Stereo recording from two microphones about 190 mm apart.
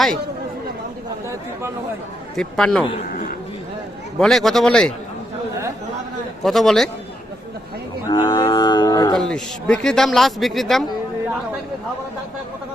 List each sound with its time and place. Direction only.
2.3 s a man's voice: 5° left (ahead or behind)
4.2 s a man's voice: centre (ahead or behind)
6.4 s a man's voice: centre (ahead or behind)
8.0 s cattle: 20° left (ahead or behind)
9.1 s a man's voice: 5° left (ahead or behind)